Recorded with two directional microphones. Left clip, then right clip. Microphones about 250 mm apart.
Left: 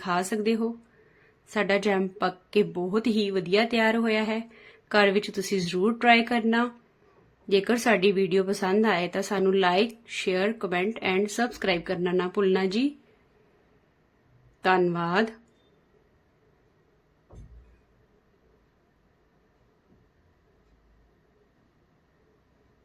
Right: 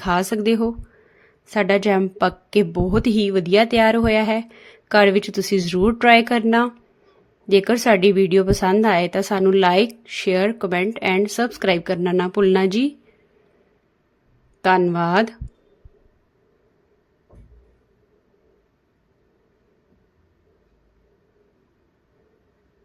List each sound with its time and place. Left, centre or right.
0.0 s a woman's voice: right
14.6 s a woman's voice: centre